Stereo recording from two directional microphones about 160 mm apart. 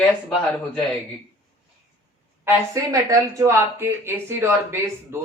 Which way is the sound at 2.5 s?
20° right (ahead or behind).